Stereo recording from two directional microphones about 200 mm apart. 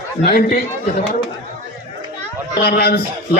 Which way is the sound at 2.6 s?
50° left (ahead or behind).